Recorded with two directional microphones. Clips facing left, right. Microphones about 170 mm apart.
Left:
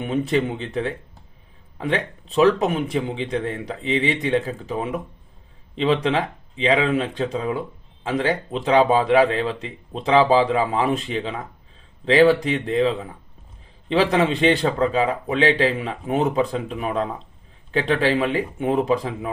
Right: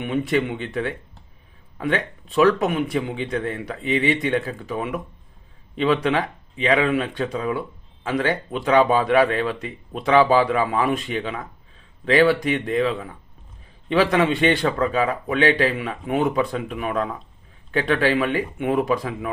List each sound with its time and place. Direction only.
0.3 s speech: 35° left (ahead or behind)